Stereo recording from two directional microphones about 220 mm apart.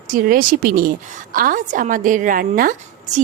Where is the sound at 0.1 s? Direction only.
40° right (ahead or behind).